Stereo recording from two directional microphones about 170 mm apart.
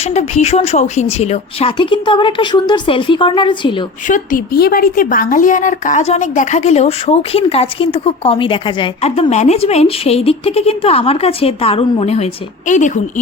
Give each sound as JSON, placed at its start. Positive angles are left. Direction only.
{"t": 0.0, "sound": "speech", "side_deg": 40}
{"t": 4.0, "sound": "speech", "side_deg": 50}